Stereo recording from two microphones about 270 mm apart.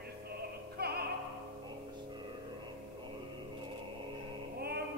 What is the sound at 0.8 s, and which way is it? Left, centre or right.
Opera, right.